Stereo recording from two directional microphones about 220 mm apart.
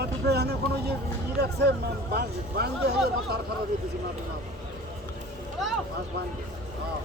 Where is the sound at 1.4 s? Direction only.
45° right (ahead or behind).